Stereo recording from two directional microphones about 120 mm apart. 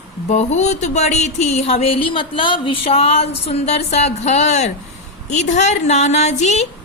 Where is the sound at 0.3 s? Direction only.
70° left (ahead or behind).